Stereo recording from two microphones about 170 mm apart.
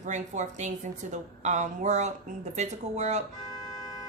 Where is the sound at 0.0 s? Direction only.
45° right (ahead or behind).